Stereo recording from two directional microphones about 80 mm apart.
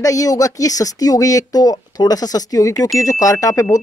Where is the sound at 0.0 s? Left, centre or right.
Left.